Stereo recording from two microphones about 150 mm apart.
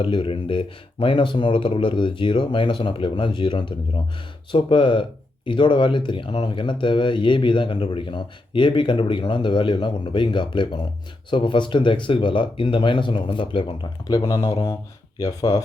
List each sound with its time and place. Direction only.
0.0 s speech: 35° left (ahead or behind)
14.3 s speech: 25° left (ahead or behind)